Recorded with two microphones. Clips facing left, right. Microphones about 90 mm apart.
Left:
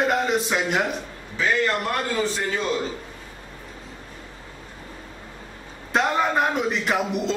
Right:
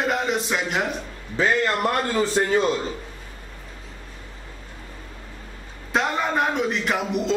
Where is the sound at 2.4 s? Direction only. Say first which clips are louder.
Right 6 dB; 40° right (ahead or behind).